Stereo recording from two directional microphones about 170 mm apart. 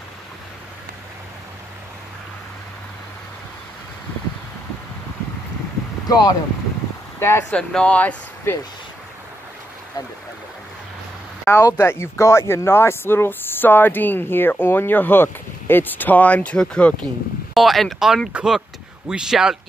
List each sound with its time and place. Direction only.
6.0 s speech: 20° left (ahead or behind)
11.4 s speech: 15° left (ahead or behind); by 19.5 s 5° right (ahead or behind)